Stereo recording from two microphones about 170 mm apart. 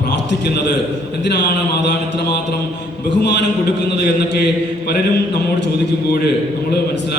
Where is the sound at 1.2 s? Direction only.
90° left.